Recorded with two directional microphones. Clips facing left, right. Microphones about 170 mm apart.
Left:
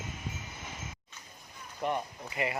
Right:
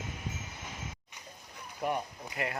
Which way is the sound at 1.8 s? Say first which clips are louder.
Even; 5° right (ahead or behind).